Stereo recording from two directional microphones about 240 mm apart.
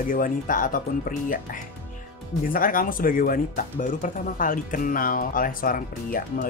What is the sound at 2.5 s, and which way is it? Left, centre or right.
Speech, left.